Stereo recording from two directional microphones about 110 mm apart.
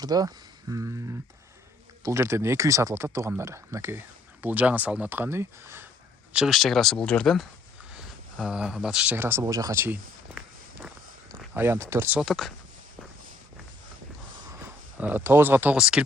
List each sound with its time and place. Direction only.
0.0 s speech: 35° right (ahead or behind)
6.3 s speech: 5° right (ahead or behind)
8.4 s speech: 10° right (ahead or behind)
9.1 s speech: 20° right (ahead or behind)
12.2 s speech: centre (ahead or behind)
14.9 s speech: 15° right (ahead or behind)